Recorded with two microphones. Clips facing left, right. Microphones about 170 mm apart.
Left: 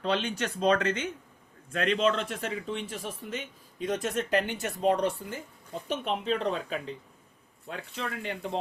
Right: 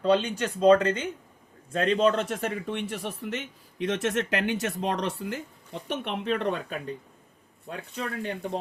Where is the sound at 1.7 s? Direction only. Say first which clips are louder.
Right 3 dB; 40° right (ahead or behind); by 7.0 s 55° right (ahead or behind).